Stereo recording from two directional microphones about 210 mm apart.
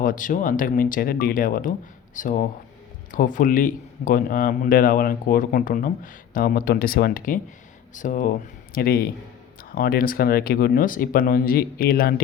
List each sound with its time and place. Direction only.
0.0 s speech: 40° left (ahead or behind)